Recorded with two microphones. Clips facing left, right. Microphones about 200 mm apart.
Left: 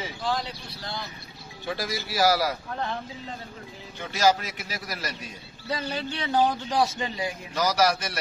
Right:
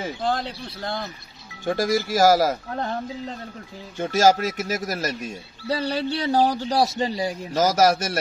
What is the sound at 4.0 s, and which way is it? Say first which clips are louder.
A man's voice: right 5 dB; 45° right (ahead or behind).